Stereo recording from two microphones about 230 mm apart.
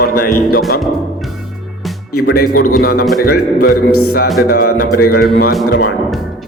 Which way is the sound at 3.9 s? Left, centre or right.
Left.